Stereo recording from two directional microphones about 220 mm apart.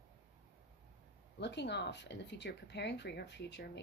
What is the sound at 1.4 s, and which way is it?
Speech, 50° left (ahead or behind).